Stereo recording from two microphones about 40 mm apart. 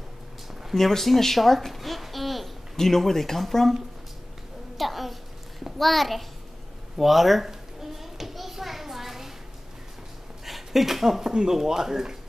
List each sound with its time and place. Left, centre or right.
0.7 s a child's voice: centre
4.7 s a sound: centre
5.8 s speech: centre
7.0 s children playing: centre
10.4 s speech: centre